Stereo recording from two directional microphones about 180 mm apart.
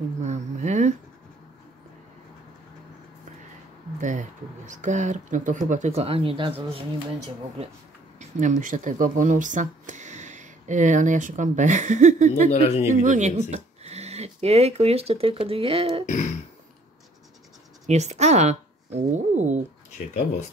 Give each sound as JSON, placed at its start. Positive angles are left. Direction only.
{"t": 0.2, "sound": "a sound", "side_deg": -40}
{"t": 4.0, "sound": "speech", "side_deg": -45}
{"t": 8.2, "sound": "speech", "side_deg": -45}
{"t": 12.4, "sound": "speech", "side_deg": 35}
{"t": 13.0, "sound": "speech", "side_deg": -40}
{"t": 17.8, "sound": "speech", "side_deg": -40}
{"t": 20.0, "sound": "speech", "side_deg": 40}